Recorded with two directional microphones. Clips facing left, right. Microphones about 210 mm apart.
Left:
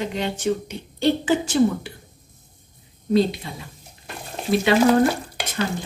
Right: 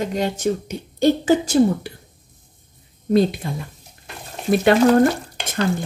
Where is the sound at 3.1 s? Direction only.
50° right (ahead or behind).